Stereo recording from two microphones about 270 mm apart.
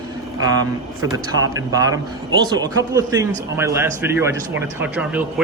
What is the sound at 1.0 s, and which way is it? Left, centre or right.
A man's voice, centre.